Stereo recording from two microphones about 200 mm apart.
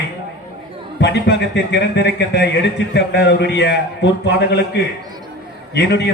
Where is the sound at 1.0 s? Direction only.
60° left (ahead or behind).